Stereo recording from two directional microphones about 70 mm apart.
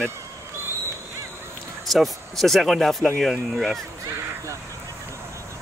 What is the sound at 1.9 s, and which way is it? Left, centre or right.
Speech, centre.